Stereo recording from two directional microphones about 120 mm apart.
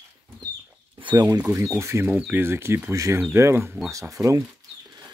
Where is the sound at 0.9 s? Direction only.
40° right (ahead or behind).